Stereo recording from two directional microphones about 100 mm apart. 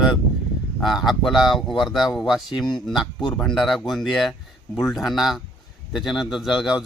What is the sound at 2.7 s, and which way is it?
Speech, 50° left (ahead or behind).